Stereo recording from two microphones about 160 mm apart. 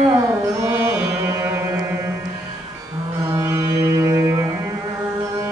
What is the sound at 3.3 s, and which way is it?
Music, 15° right (ahead or behind).